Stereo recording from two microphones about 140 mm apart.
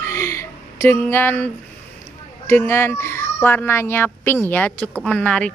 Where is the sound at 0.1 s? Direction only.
20° left (ahead or behind).